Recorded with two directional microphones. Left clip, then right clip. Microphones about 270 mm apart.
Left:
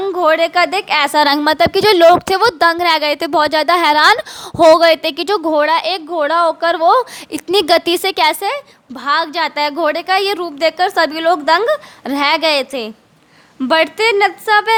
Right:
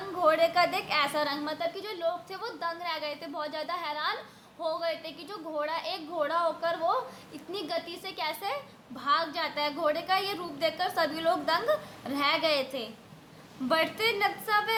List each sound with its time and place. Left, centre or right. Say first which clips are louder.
0.2 s a woman's voice: left 11 dB; left